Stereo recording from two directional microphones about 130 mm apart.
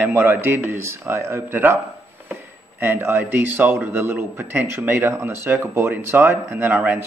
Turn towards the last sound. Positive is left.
turn(degrees=-15)  # may be behind; listen again after turning